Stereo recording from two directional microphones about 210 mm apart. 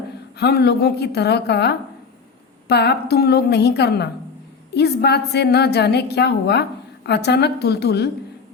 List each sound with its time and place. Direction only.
0.3 s a woman's voice: 50° left (ahead or behind)